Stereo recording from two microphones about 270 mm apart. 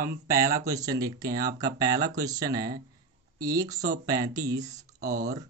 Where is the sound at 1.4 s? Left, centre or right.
Right.